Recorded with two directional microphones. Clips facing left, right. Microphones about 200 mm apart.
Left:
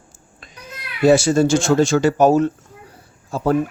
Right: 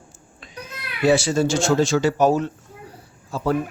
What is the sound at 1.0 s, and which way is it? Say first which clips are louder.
Speech: left 4 dB; 45° left (ahead or behind).